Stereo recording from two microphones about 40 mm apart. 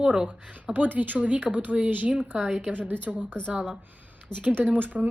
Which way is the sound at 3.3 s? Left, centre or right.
Left.